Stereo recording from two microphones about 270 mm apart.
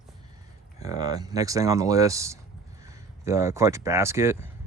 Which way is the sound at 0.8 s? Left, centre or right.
Centre.